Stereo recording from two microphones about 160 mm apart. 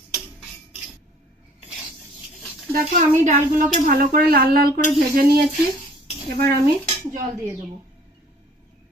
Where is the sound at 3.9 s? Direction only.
70° right (ahead or behind).